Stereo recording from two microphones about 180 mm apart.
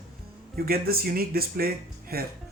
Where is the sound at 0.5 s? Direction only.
55° right (ahead or behind).